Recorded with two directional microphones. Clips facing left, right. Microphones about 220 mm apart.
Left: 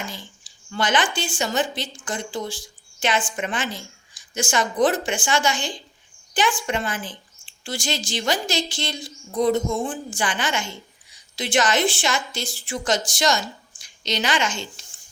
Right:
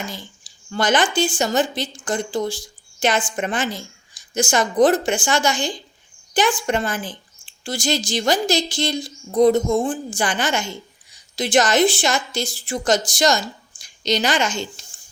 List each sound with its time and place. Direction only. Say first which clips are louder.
0.7 s a woman's voice: right 4 dB; 40° right (ahead or behind)